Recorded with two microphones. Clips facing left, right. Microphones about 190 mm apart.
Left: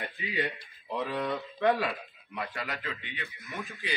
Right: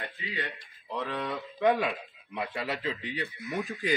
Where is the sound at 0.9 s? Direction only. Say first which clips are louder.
Left 2 dB; 5° left (ahead or behind).